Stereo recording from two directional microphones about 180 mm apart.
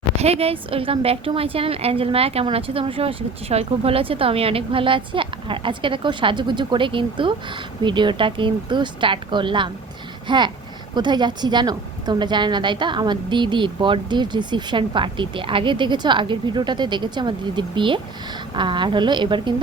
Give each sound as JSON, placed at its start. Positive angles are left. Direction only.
{"t": 0.2, "sound": "a woman's voice", "side_deg": -35}